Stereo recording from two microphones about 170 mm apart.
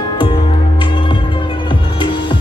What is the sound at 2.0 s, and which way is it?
Music, 30° left (ahead or behind).